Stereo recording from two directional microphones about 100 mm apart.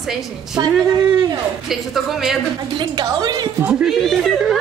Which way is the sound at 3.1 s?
45° right (ahead or behind).